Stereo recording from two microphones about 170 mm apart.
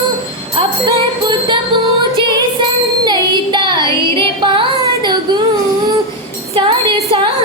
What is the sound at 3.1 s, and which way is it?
Child singing, 25° right (ahead or behind).